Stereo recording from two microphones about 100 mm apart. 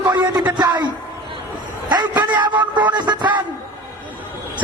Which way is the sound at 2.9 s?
45° right (ahead or behind).